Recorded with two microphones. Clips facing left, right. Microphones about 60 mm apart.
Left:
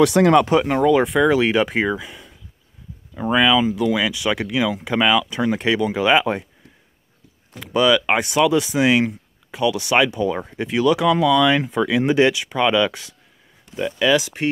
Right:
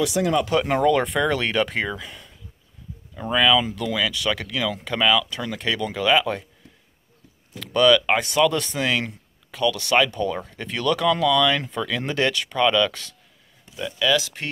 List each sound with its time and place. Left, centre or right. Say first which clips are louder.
0.0 s speech: left 8 dB; left
0.7 s speech: left 3 dB; centre; by 6.4 s left
7.5 s speech: even; centre
13.7 s speech: left 4 dB; left